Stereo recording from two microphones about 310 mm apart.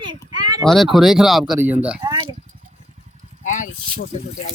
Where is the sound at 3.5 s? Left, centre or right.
Left.